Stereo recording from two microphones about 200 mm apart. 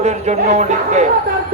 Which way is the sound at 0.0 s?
35° right (ahead or behind).